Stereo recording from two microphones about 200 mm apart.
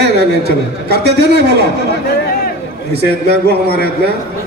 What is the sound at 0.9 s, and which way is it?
Speech, 55° right (ahead or behind).